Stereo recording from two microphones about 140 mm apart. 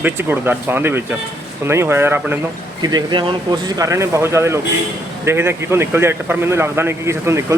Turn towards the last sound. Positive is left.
turn(degrees=-20)  # may be behind; listen again after turning